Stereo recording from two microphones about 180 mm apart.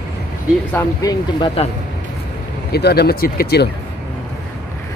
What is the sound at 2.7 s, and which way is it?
Speech, 65° left (ahead or behind).